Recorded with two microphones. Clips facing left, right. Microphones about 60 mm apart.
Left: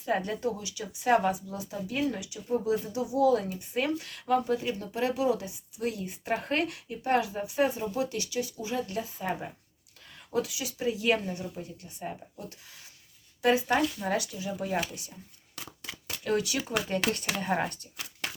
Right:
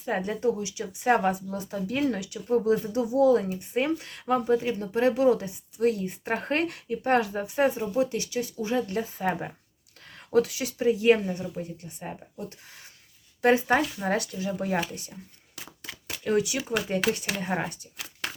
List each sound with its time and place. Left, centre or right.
0.0 s speech: right
13.4 s speech: right
15.5 s a sound: centre
16.9 s speech: centre